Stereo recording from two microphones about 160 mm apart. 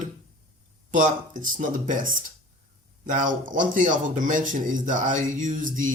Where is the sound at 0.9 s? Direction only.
50° right (ahead or behind).